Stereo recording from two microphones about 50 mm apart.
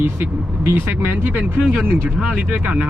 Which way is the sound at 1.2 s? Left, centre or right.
Right.